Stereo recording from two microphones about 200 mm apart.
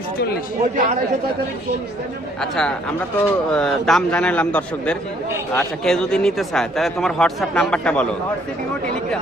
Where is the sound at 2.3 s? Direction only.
Centre (ahead or behind).